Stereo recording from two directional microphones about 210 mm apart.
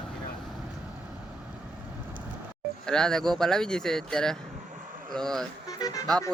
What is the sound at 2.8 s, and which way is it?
Speech, 5° left (ahead or behind).